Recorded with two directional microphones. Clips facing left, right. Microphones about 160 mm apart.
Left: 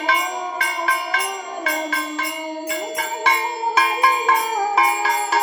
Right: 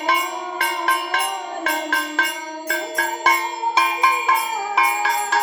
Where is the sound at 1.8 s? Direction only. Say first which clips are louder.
Right 1 dB; 85° right.